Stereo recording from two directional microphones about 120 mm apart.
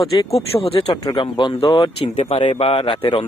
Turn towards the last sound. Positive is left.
turn(degrees=50)  # may be behind; listen again after turning